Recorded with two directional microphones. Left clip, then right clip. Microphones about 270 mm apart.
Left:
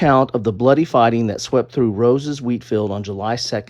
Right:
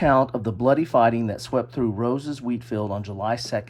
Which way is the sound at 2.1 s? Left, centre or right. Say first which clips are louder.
Left 7 dB; left.